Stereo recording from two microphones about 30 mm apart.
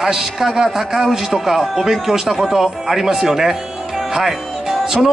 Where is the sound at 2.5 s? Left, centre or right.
Centre.